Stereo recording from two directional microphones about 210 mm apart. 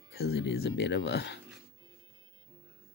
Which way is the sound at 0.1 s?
50° left (ahead or behind).